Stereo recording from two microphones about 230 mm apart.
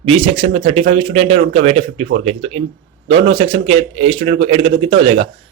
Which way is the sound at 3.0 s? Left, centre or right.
Right.